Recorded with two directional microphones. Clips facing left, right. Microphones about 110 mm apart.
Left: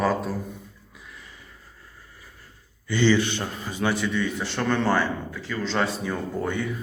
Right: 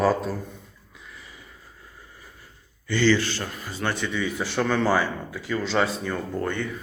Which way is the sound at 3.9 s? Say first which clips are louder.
Left 2 dB; centre (ahead or behind).